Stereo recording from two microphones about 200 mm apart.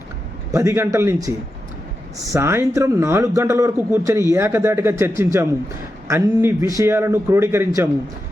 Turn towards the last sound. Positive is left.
turn(degrees=-15)  # may be behind; listen again after turning